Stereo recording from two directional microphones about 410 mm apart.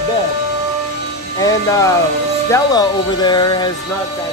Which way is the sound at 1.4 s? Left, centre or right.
Centre.